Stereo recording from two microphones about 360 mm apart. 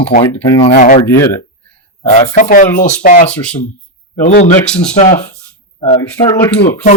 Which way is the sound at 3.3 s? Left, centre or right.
Centre.